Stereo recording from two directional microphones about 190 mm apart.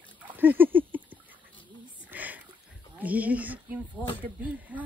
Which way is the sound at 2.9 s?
10° right (ahead or behind).